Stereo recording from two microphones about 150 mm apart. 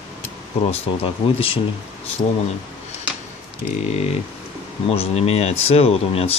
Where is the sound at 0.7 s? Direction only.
35° left (ahead or behind).